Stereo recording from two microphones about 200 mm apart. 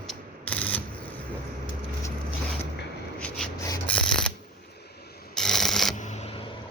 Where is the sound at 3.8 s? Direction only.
5° left (ahead or behind).